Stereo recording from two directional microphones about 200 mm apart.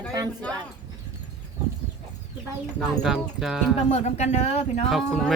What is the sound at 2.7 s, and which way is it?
Speech, centre (ahead or behind).